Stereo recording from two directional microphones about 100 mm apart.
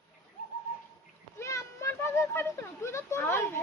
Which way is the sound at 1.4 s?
30° left (ahead or behind).